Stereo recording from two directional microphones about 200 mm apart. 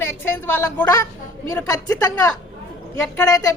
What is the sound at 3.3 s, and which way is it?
Speech, 15° left (ahead or behind).